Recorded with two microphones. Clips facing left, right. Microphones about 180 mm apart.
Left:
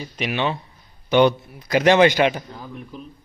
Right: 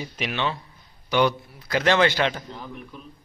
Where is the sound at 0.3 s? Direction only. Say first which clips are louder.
Left 5 dB; 15° left (ahead or behind).